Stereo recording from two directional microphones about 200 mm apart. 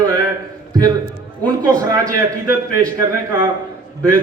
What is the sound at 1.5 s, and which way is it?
Speech, 20° right (ahead or behind).